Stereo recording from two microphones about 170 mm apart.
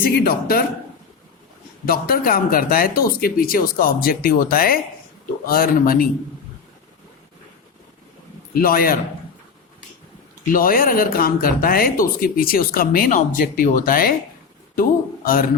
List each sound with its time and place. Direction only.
0.0 s speech: 60° left (ahead or behind)
1.8 s speech: 60° left (ahead or behind)
8.5 s speech: 60° left (ahead or behind)
10.5 s speech: 55° left (ahead or behind)